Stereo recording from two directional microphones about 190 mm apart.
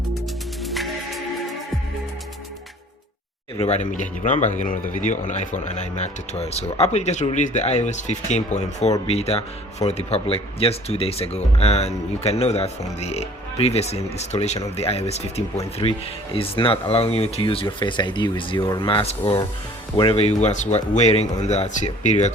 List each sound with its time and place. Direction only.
0.6 s music: centre (ahead or behind)
3.6 s speech: 35° left (ahead or behind)